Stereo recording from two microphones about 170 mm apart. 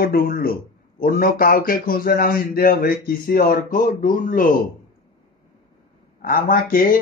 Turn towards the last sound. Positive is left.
turn(degrees=55)  # may be behind; listen again after turning